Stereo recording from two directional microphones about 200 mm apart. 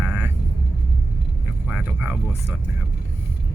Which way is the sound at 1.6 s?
5° right (ahead or behind).